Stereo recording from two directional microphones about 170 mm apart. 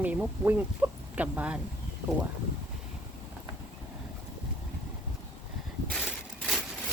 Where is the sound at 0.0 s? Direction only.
10° right (ahead or behind).